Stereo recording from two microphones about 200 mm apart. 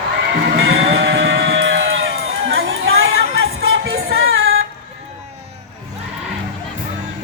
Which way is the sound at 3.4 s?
75° right (ahead or behind).